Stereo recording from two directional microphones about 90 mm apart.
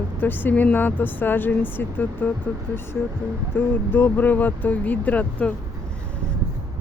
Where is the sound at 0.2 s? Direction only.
20° left (ahead or behind).